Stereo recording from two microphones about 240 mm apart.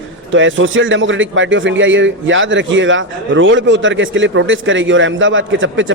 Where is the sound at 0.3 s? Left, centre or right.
Right.